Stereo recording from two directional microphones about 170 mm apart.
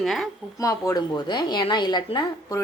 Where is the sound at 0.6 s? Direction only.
20° left (ahead or behind).